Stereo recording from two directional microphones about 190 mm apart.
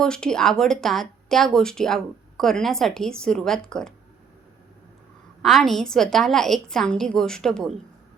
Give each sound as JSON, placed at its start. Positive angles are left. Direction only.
{"t": 0.0, "sound": "a woman's voice", "side_deg": 5}
{"t": 5.4, "sound": "a woman's voice", "side_deg": 0}